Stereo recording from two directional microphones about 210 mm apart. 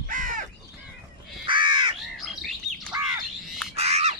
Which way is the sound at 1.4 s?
25° right (ahead or behind).